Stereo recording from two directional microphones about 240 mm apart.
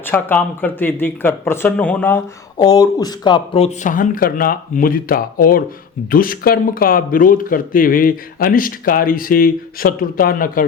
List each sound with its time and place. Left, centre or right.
0.0 s speech: centre; by 10.7 s left